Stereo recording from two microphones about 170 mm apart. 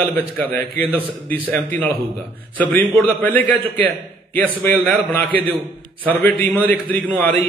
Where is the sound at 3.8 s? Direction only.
60° right (ahead or behind).